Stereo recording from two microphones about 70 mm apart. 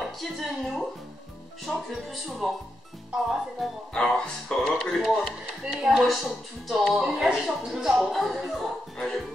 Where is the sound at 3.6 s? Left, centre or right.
Centre.